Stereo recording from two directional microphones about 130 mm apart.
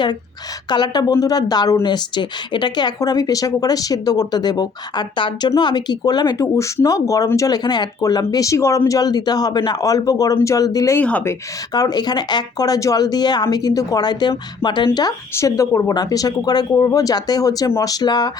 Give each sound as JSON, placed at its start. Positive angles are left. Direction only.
{"t": 0.7, "sound": "speech", "side_deg": 35}
{"t": 10.9, "sound": "speech", "side_deg": 15}
{"t": 11.7, "sound": "speech", "side_deg": 30}